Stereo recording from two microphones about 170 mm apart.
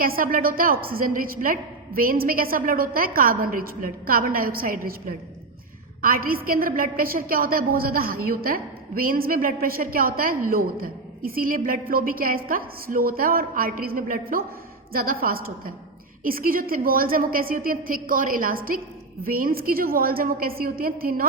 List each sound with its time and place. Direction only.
0.0 s a woman's voice: 55° right (ahead or behind)